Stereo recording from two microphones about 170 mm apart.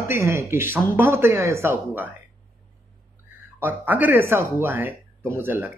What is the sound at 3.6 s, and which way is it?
Speech, 10° right (ahead or behind).